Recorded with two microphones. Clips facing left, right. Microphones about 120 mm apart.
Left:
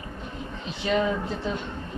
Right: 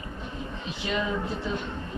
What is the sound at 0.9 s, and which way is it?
Speech, 45° left (ahead or behind).